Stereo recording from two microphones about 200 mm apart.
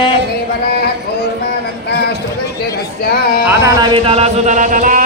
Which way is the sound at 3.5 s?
20° right (ahead or behind).